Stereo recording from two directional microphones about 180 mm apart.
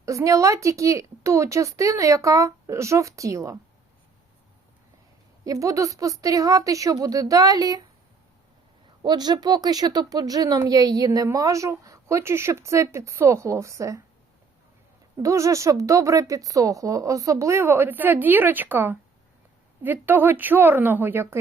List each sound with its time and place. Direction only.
0.0 s speech: 15° right (ahead or behind)
5.5 s a woman's voice: 15° right (ahead or behind)
9.0 s speech: 25° right (ahead or behind)
15.2 s speech: 15° right (ahead or behind)